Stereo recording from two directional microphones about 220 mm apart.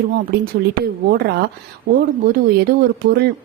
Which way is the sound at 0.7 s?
45° right (ahead or behind).